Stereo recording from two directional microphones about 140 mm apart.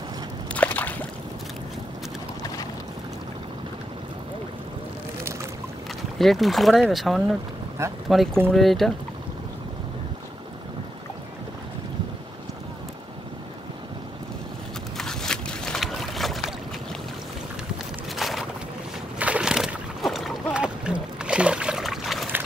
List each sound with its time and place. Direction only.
0.5 s a sound: 10° left (ahead or behind)
6.1 s speech: centre (ahead or behind)
7.8 s speech: 20° right (ahead or behind)
8.5 s speech: centre (ahead or behind)
15.0 s boat: 5° left (ahead or behind)
18.1 s a sound: centre (ahead or behind)